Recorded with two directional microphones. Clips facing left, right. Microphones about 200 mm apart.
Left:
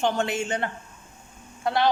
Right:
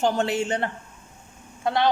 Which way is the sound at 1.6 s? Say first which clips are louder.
Right 1 dB; 20° right (ahead or behind).